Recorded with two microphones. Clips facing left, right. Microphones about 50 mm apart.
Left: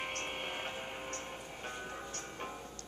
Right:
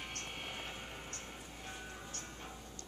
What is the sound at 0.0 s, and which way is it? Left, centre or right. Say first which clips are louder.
Music: left 6 dB; left.